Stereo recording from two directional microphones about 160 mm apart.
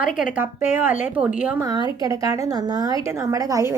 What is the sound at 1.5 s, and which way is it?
A woman's voice, 25° right (ahead or behind).